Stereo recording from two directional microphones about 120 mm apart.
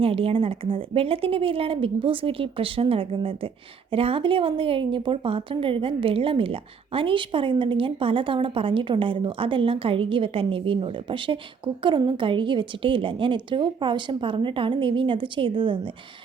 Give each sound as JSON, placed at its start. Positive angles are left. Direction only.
{"t": 0.0, "sound": "speech", "side_deg": -50}